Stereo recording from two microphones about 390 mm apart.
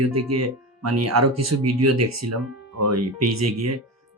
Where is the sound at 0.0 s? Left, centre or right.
Right.